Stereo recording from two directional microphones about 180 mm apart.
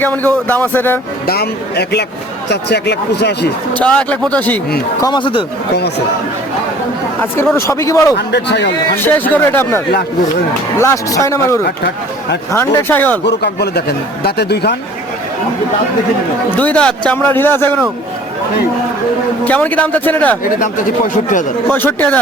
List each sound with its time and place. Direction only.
0.0 s a man's voice: 10° left (ahead or behind)
1.3 s speech: 65° left (ahead or behind)
3.8 s a man's voice: 5° left (ahead or behind)
4.9 s speech: 25° left (ahead or behind)
7.5 s a man's voice: 15° left (ahead or behind)
8.3 s speech: 70° left (ahead or behind)
9.0 s a man's voice: 10° left (ahead or behind)
13.2 s speech: 65° left (ahead or behind)
16.5 s a man's voice: 10° left (ahead or behind)
19.5 s a man's voice: 10° left (ahead or behind)
20.4 s speech: 45° left (ahead or behind)
21.7 s a man's voice: 10° left (ahead or behind)